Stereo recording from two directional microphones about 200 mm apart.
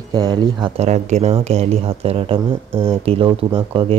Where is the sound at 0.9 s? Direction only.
35° right (ahead or behind).